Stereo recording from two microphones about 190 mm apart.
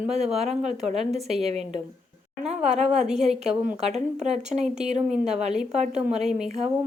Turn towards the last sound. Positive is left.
turn(degrees=-35)  # may be behind; listen again after turning